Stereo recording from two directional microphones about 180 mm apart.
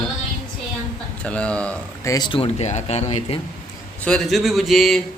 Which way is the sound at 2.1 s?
25° left (ahead or behind).